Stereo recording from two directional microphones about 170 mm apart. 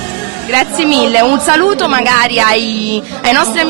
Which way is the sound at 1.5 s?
15° right (ahead or behind).